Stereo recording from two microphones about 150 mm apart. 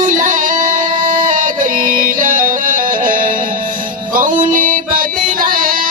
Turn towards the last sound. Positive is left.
turn(degrees=-70)  # may be behind; listen again after turning